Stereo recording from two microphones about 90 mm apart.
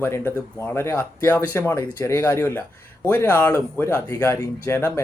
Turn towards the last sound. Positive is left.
turn(degrees=30)  # may be behind; listen again after turning